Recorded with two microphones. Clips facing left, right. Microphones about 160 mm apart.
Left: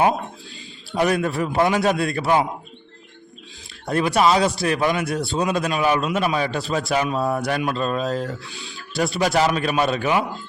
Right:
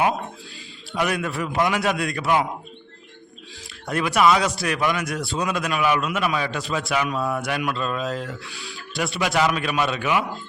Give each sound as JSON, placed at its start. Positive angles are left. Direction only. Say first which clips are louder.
{"t": 0.9, "sound": "a man's voice", "louder": "left 4 dB", "side_deg": 35}
{"t": 3.8, "sound": "a man's voice", "louder": "left 1 dB", "side_deg": 30}
{"t": 8.4, "sound": "speech", "louder": "even", "side_deg": 20}
{"t": 9.0, "sound": "a man's voice", "louder": "left 3 dB", "side_deg": 40}